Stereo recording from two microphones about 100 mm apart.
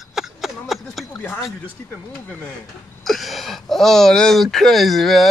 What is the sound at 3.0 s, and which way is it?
Speech, centre (ahead or behind).